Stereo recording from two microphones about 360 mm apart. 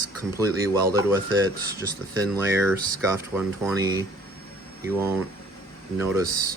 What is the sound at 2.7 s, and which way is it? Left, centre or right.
Speech, centre.